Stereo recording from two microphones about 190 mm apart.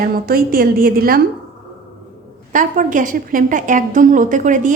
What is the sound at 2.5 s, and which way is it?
A woman's voice, 45° right (ahead or behind).